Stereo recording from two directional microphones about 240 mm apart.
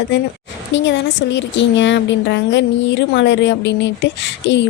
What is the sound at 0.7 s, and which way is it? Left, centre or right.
Speech, left.